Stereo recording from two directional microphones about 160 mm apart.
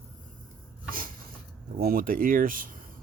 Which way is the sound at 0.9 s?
60° right (ahead or behind).